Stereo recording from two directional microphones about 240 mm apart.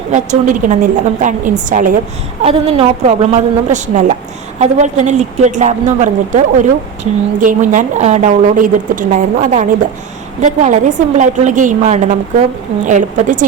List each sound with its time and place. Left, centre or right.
0.1 s a woman's voice: right
2.4 s a woman's voice: right